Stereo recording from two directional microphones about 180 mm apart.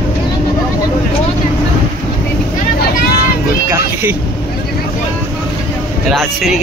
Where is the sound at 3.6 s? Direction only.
15° right (ahead or behind).